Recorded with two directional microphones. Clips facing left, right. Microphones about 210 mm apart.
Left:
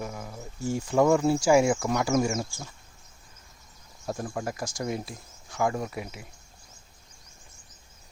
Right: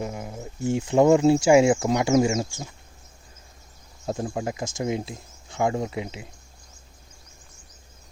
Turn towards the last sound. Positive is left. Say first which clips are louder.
# right 4 dB
turn(degrees=-25)  # may be behind; listen again after turning